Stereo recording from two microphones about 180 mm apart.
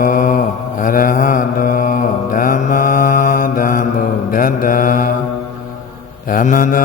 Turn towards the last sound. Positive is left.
turn(degrees=45)  # may be behind; listen again after turning